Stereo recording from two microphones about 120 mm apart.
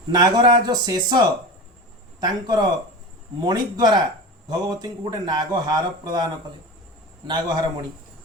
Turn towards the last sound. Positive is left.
turn(degrees=-35)  # may be behind; listen again after turning